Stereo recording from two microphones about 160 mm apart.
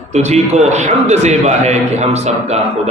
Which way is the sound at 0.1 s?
45° right (ahead or behind).